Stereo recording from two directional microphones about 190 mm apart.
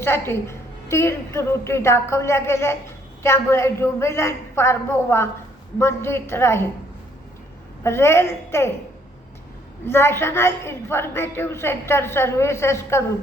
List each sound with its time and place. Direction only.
0.0 s a woman's voice: 10° left (ahead or behind)
7.9 s a woman's voice: 15° left (ahead or behind)
9.8 s a woman's voice: 10° left (ahead or behind)